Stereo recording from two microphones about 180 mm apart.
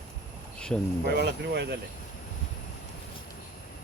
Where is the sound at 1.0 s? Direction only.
65° right (ahead or behind).